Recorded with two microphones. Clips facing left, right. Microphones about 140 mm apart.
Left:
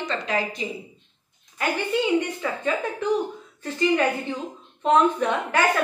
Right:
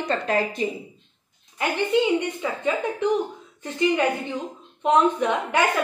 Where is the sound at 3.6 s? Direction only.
20° right (ahead or behind).